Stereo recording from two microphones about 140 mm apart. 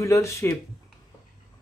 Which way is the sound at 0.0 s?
20° left (ahead or behind).